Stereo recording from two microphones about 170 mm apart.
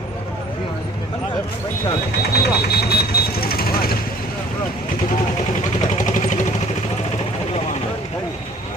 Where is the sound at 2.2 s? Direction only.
70° left (ahead or behind).